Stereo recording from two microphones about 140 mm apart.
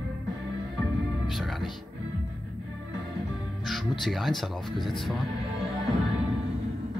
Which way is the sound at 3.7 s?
Centre (ahead or behind).